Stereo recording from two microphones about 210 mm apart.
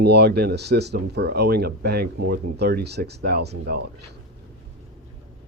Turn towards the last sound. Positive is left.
turn(degrees=-50)  # may be behind; listen again after turning